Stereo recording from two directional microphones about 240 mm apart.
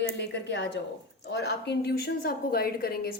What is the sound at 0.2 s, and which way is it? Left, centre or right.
A woman's voice, left.